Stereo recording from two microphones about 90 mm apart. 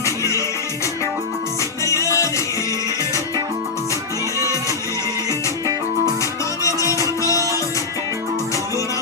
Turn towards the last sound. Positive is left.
turn(degrees=35)  # may be behind; listen again after turning